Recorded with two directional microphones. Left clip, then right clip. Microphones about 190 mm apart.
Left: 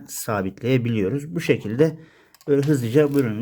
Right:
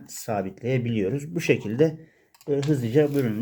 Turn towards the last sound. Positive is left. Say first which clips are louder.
# left 3 dB
turn(degrees=25)  # may be behind; listen again after turning